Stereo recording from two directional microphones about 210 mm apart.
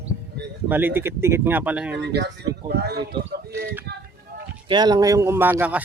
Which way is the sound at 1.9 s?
55° right (ahead or behind).